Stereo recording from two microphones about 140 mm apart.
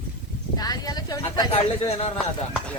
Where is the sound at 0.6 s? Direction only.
30° left (ahead or behind).